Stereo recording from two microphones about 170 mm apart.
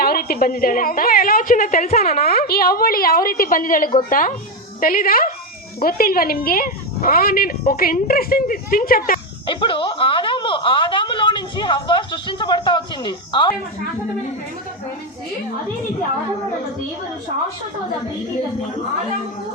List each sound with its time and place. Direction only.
0.0 s a woman's voice: 60° left (ahead or behind); by 2.1 s 45° left (ahead or behind)
2.1 s a woman's voice: 60° left (ahead or behind)
9.5 s speech: 30° left (ahead or behind)